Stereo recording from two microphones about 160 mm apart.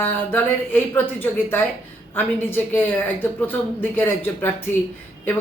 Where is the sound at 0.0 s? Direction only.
10° left (ahead or behind).